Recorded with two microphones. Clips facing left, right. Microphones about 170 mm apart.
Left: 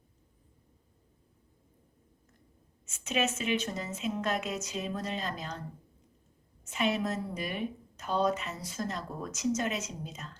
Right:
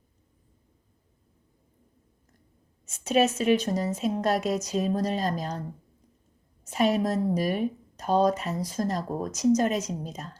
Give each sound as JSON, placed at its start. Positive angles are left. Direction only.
{"t": 2.8, "sound": "a woman's voice", "side_deg": -40}
{"t": 6.7, "sound": "a woman's voice", "side_deg": -40}